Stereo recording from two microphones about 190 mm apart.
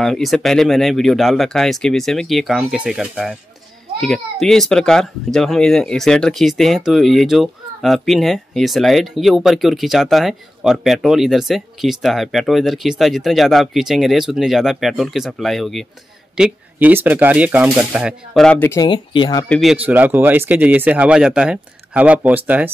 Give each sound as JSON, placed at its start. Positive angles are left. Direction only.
{"t": 0.0, "sound": "speech", "side_deg": 0}
{"t": 18.8, "sound": "speech", "side_deg": 25}
{"t": 19.5, "sound": "speech", "side_deg": 0}